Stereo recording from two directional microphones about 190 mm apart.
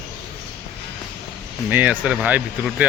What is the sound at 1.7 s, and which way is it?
Speech, 10° right (ahead or behind).